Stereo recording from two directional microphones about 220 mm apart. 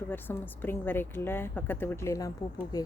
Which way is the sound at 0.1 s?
10° left (ahead or behind).